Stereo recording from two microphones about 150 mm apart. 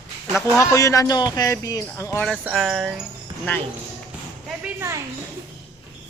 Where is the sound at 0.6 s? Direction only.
20° left (ahead or behind).